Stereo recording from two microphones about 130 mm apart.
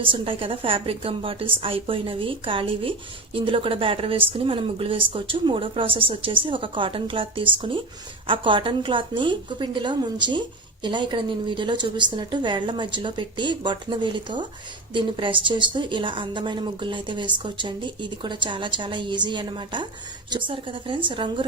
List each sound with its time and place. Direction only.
0.0 s a woman's voice: 40° right (ahead or behind)